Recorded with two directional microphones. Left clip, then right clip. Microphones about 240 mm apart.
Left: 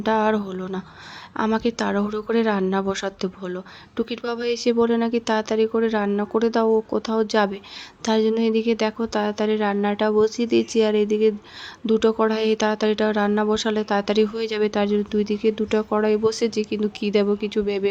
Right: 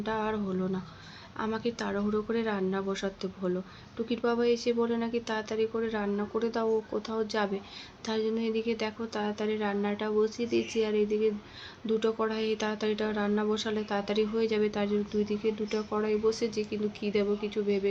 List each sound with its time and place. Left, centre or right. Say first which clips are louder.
0.0 s speech: left 11 dB; left